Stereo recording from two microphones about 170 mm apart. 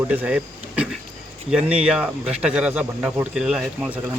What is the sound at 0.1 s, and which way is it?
Speech, 10° right (ahead or behind).